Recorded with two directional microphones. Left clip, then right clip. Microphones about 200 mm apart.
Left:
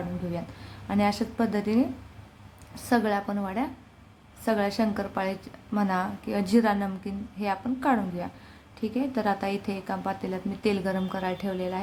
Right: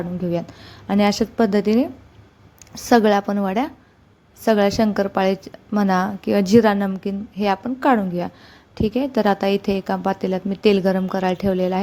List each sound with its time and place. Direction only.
0.3 s a woman's voice: 35° right (ahead or behind)